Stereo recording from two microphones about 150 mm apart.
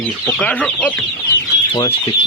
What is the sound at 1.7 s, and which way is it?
Speech, 35° left (ahead or behind).